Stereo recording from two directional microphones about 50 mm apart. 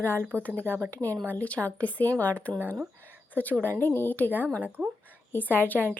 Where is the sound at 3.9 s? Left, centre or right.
Left.